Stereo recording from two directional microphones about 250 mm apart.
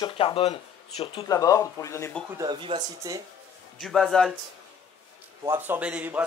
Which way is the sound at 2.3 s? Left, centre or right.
Centre.